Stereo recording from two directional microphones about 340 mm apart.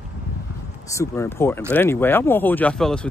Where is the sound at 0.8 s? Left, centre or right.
Centre.